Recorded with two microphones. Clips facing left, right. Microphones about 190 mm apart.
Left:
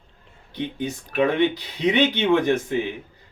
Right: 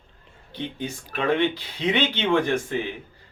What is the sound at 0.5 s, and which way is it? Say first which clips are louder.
Speech: left 3 dB; 20° left (ahead or behind).